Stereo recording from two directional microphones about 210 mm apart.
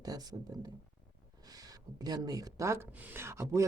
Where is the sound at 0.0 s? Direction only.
20° right (ahead or behind).